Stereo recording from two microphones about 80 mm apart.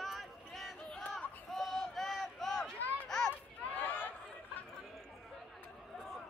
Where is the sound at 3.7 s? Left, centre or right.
Left.